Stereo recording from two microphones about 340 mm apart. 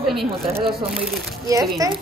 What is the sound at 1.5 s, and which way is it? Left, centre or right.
Speech, centre.